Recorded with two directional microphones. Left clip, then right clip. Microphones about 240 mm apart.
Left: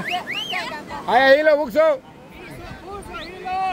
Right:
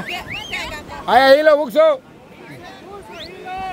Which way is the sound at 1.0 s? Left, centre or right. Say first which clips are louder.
Right 3 dB; centre.